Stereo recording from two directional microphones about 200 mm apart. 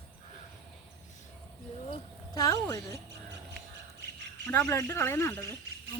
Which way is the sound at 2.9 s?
55° right (ahead or behind).